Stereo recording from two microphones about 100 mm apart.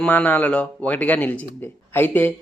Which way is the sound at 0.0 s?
15° left (ahead or behind).